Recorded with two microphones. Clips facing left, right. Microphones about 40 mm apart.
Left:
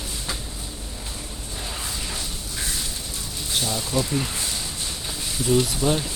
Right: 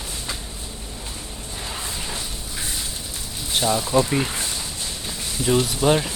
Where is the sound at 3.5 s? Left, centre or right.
Right.